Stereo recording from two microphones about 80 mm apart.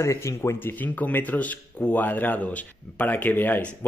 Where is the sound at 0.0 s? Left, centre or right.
Left.